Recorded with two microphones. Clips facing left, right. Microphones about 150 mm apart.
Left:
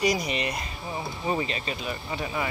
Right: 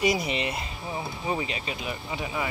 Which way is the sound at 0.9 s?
5° right (ahead or behind).